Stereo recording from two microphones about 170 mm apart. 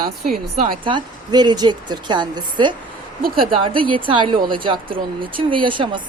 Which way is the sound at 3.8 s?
30° right (ahead or behind).